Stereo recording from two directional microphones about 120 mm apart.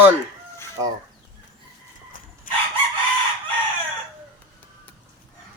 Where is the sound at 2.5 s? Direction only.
90° left.